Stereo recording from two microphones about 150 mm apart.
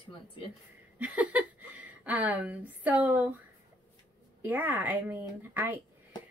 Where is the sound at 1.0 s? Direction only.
10° right (ahead or behind).